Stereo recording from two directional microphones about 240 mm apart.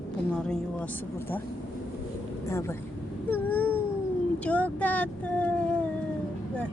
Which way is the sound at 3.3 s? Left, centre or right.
Centre.